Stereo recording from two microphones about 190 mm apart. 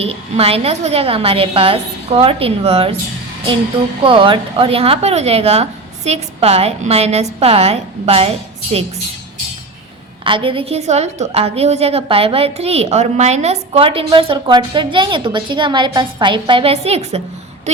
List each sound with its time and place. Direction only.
0.0 s a woman's voice: 30° right (ahead or behind)
4.0 s a woman's voice: 25° right (ahead or behind)
10.2 s a woman's voice: 25° right (ahead or behind)